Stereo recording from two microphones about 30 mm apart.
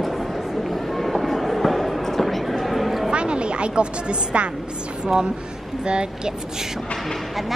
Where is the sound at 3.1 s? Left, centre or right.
Right.